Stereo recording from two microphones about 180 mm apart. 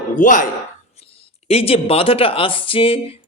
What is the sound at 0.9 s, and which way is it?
Speech, 35° left (ahead or behind).